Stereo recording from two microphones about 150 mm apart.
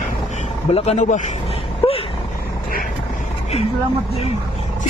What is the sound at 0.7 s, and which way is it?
Speech, 50° left (ahead or behind).